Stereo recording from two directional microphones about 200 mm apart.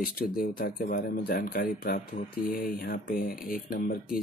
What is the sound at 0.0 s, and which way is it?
Speech, 45° left (ahead or behind).